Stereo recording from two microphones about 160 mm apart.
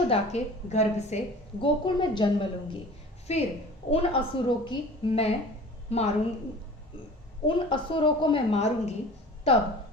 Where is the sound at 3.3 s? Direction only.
40° left (ahead or behind).